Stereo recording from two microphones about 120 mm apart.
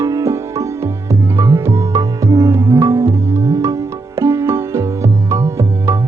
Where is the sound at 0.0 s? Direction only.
25° right (ahead or behind).